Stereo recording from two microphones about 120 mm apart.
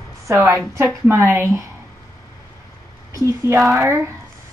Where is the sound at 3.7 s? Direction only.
25° right (ahead or behind).